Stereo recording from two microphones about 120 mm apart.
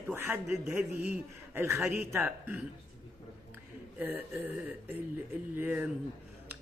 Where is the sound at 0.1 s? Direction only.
20° right (ahead or behind).